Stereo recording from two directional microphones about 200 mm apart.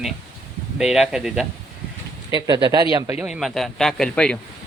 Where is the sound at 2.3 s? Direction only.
20° right (ahead or behind).